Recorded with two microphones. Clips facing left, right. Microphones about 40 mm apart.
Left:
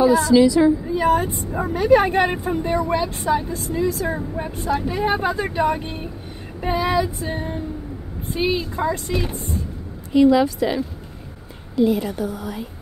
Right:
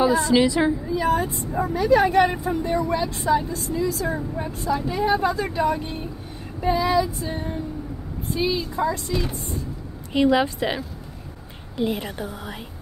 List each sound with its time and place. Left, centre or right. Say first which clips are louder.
0.0 s a woman's voice: left 4 dB; right
0.9 s speech: left 3 dB; left
8.5 s speech: left 2 dB; left
10.1 s a woman's voice: left 4 dB; right